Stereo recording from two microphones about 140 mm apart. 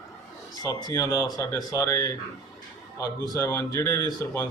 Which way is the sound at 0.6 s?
25° left (ahead or behind).